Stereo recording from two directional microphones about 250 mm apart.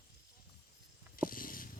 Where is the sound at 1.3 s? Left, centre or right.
Left.